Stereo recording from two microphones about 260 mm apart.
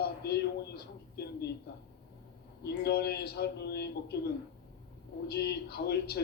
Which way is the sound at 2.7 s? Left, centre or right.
Left.